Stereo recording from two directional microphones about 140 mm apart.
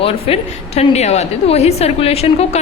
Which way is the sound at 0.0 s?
45° left (ahead or behind).